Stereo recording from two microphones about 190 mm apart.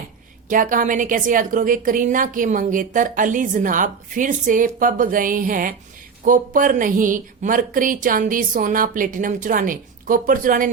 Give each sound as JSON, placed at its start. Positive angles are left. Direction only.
{"t": 0.4, "sound": "a woman's voice", "side_deg": -45}